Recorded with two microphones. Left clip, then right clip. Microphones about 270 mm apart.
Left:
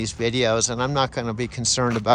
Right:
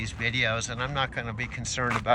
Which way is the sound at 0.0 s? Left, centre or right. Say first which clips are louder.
Left 5 dB; centre.